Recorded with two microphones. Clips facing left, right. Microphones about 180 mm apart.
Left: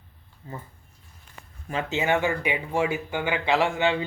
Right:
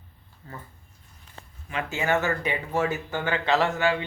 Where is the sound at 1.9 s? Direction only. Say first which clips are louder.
Left 1 dB; 20° left (ahead or behind).